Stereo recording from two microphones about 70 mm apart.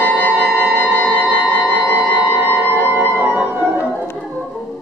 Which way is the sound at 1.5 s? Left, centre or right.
Left.